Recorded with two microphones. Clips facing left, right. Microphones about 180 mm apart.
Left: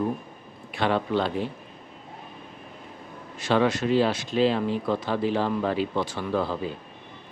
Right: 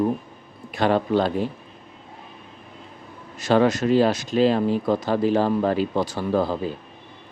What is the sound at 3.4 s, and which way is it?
Speech, 40° right (ahead or behind).